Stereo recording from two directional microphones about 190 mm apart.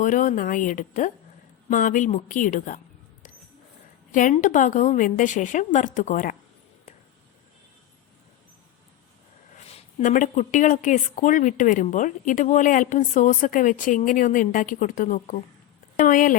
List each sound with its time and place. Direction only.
0.0 s a woman's voice: 40° left (ahead or behind)
4.1 s a woman's voice: 45° left (ahead or behind)
9.6 s a woman's voice: 35° left (ahead or behind)